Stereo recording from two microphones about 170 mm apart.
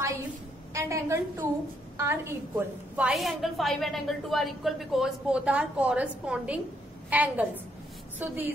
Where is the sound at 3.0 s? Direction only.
Centre (ahead or behind).